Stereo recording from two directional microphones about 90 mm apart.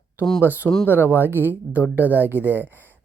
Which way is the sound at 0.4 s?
20° right (ahead or behind).